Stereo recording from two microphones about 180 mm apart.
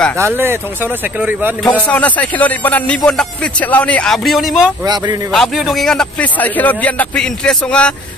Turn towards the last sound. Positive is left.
turn(degrees=5)  # may be behind; listen again after turning